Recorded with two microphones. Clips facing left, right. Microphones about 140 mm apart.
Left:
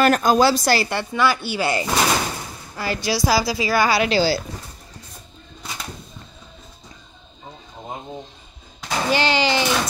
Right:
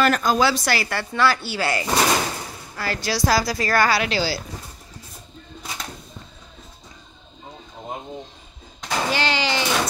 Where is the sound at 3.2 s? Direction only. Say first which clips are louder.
Even; 5° left (ahead or behind).